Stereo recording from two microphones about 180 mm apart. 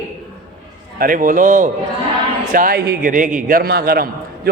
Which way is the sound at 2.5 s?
60° right (ahead or behind).